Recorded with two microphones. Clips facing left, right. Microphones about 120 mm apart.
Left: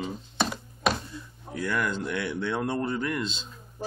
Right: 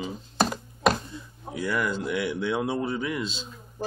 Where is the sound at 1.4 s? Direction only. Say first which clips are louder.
Right 1 dB; 5° right (ahead or behind).